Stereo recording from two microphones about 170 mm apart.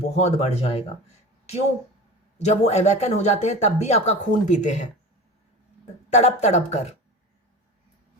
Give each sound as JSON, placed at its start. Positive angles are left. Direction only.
{"t": 0.0, "sound": "speech", "side_deg": 40}
{"t": 2.4, "sound": "speech", "side_deg": 40}
{"t": 6.1, "sound": "speech", "side_deg": 40}